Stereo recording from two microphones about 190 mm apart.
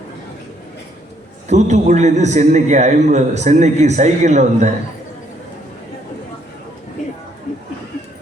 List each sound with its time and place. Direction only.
1.5 s a man's voice: 40° right (ahead or behind)